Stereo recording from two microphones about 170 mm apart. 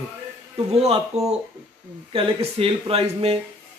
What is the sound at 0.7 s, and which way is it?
A man's voice, 40° right (ahead or behind).